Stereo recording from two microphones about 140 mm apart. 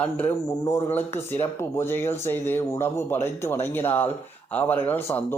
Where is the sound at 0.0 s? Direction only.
10° left (ahead or behind).